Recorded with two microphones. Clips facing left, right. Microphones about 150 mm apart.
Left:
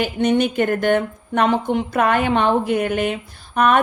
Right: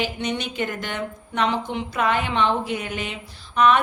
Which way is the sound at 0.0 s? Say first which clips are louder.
Left 9 dB; 50° left (ahead or behind).